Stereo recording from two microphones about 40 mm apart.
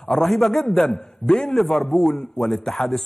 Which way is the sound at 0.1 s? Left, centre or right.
Centre.